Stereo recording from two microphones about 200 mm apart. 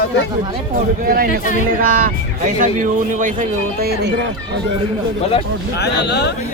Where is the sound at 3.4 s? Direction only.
50° right (ahead or behind).